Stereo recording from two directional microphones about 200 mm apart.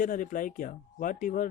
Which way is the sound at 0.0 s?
40° left (ahead or behind).